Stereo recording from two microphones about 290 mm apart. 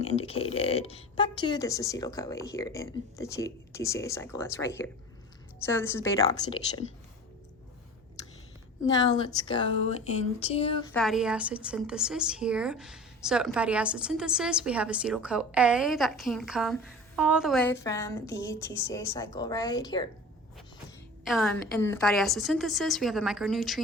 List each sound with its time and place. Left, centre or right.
0.0 s speech: left
9.5 s speech: centre
10.9 s a woman's voice: centre
21.2 s a woman's voice: centre